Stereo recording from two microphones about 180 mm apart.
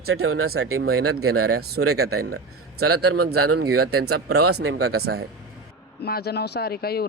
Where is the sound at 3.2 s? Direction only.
60° right (ahead or behind).